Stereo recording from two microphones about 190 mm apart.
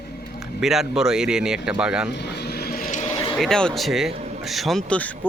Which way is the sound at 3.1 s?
15° left (ahead or behind).